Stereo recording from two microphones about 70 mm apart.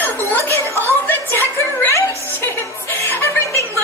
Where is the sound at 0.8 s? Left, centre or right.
Left.